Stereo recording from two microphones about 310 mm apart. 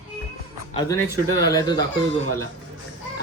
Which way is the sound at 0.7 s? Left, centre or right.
Centre.